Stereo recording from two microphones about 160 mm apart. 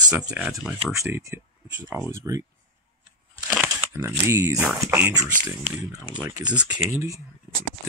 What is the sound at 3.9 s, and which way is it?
Speech, 15° right (ahead or behind).